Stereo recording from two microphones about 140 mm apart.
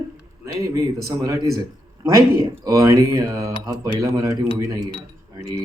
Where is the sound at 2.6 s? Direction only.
25° right (ahead or behind).